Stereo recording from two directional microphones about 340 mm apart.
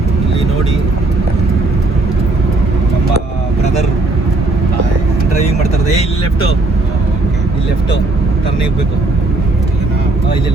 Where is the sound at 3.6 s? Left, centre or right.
Centre.